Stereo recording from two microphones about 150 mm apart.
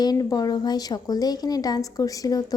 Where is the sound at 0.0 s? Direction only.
25° left (ahead or behind).